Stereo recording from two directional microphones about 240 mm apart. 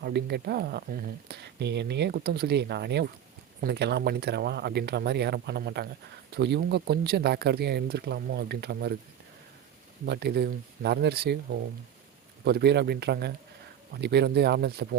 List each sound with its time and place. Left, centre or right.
0.0 s speech: right
10.1 s speech: right
12.5 s speech: right